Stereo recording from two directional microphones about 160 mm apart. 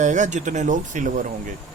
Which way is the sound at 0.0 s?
50° right (ahead or behind).